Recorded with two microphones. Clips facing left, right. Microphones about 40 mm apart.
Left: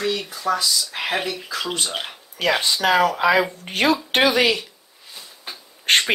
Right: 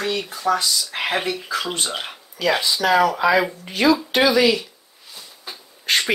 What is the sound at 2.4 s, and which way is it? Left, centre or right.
Speech, left.